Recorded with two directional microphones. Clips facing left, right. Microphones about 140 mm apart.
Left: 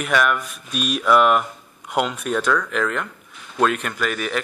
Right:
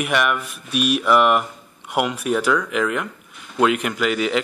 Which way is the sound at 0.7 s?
70° right (ahead or behind).